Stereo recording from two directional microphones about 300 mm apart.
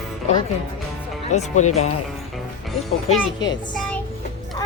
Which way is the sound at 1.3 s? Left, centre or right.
Left.